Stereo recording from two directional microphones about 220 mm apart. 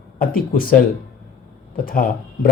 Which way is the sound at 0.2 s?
40° left (ahead or behind).